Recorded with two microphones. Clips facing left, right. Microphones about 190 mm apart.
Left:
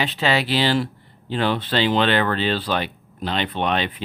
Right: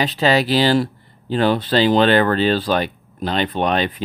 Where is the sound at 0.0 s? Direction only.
40° right (ahead or behind).